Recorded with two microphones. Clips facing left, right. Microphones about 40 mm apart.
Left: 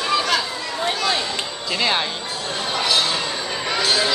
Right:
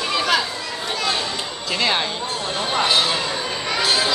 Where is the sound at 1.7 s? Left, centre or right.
Centre.